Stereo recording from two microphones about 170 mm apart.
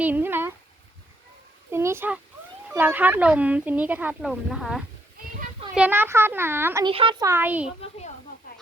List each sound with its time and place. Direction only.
0.0 s a sound: 10° right (ahead or behind)
1.7 s a sound: 15° right (ahead or behind)
2.7 s speech: 10° right (ahead or behind)
6.8 s speech: 30° right (ahead or behind)
7.3 s speech: 10° right (ahead or behind)
7.8 s a child's voice: 40° left (ahead or behind)